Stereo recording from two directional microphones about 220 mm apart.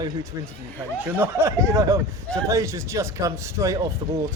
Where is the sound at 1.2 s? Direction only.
10° right (ahead or behind).